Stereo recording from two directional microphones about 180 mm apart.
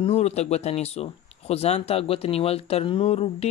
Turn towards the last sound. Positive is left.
turn(degrees=35)  # may be behind; listen again after turning